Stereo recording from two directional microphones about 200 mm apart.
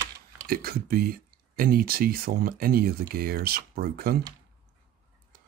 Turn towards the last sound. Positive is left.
turn(degrees=-50)  # may be behind; listen again after turning